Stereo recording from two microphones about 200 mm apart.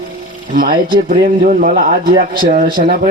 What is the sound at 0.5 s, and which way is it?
Speech, 45° right (ahead or behind).